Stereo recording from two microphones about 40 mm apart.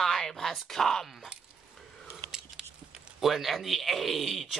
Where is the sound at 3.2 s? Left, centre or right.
Centre.